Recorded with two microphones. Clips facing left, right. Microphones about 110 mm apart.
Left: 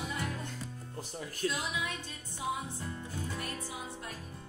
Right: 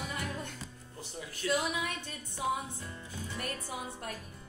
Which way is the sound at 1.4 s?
40° left (ahead or behind).